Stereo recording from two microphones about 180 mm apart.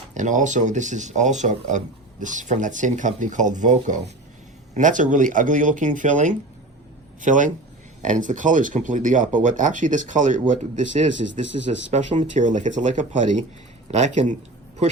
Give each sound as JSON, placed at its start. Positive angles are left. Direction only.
{"t": 0.1, "sound": "speech", "side_deg": -45}